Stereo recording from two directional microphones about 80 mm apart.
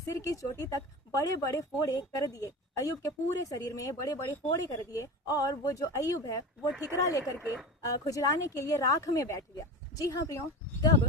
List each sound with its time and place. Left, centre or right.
0.1 s a woman's voice: left